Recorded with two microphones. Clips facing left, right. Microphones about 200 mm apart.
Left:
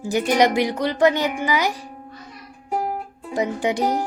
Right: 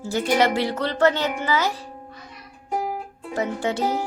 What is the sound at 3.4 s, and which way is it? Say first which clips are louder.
Speech: left 3 dB; 15° left (ahead or behind).